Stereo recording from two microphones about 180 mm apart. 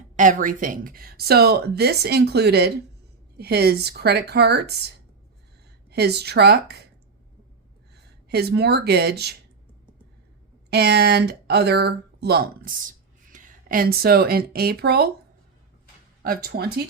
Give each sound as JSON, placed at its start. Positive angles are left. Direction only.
{"t": 0.2, "sound": "a woman's voice", "side_deg": -45}
{"t": 5.9, "sound": "a woman's voice", "side_deg": -65}
{"t": 8.3, "sound": "a woman's voice", "side_deg": -65}
{"t": 10.7, "sound": "a woman's voice", "side_deg": -65}
{"t": 16.2, "sound": "a woman's voice", "side_deg": -55}